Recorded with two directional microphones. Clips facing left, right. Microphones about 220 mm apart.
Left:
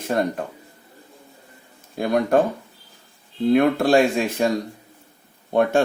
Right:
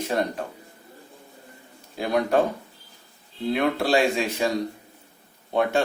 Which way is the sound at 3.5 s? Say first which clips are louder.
Left 6 dB; 50° left (ahead or behind).